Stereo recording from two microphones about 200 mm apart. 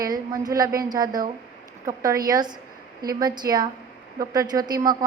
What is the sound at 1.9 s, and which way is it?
A woman's voice, 15° right (ahead or behind).